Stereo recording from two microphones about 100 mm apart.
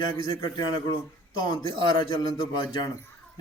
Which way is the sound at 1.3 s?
50° left (ahead or behind).